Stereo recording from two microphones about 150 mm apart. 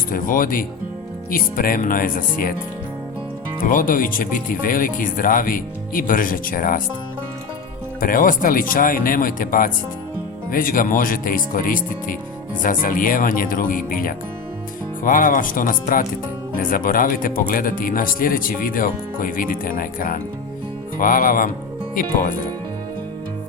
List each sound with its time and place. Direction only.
0.1 s speech: 70° left (ahead or behind)
3.6 s speech: 65° left (ahead or behind)
8.0 s speech: 70° left (ahead or behind)